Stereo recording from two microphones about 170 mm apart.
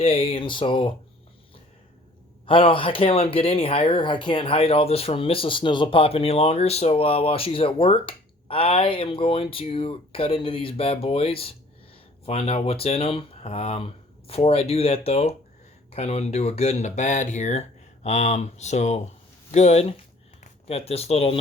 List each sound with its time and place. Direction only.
0.0 s speech: 35° left (ahead or behind)
2.5 s speech: 30° left (ahead or behind)